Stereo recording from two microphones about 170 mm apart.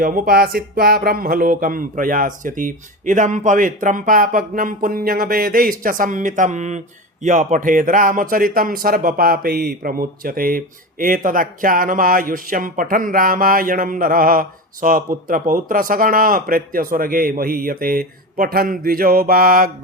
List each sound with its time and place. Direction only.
0.0 s speech: 55° right (ahead or behind)